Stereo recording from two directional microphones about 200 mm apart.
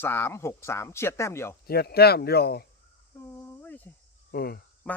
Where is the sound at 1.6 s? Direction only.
50° left (ahead or behind).